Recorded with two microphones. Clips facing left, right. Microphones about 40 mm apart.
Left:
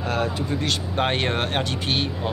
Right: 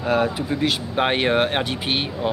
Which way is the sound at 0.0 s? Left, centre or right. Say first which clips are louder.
Right 4 dB; centre.